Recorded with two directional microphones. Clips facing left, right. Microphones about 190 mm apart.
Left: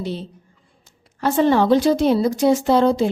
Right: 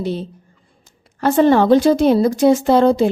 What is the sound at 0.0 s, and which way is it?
A woman's voice, 50° right (ahead or behind).